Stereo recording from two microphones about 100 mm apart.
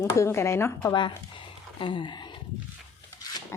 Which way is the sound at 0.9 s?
50° left (ahead or behind).